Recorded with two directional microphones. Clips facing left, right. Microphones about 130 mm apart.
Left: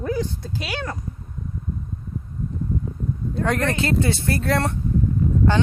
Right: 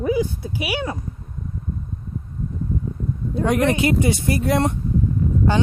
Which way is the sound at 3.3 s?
15° right (ahead or behind).